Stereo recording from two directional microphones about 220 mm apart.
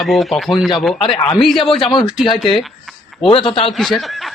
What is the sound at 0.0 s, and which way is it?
Speech, centre (ahead or behind).